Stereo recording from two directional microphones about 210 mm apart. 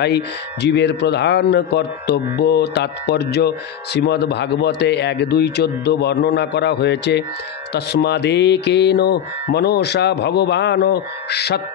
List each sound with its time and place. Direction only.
0.0 s speech: 55° left (ahead or behind)